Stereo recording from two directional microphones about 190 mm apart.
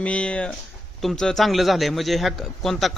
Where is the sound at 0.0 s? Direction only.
5° left (ahead or behind).